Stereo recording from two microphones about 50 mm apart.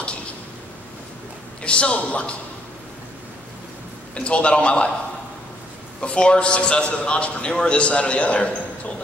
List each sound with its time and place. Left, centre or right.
1.6 s a woman's voice: left
4.1 s a man's voice: left
5.9 s a man's voice: centre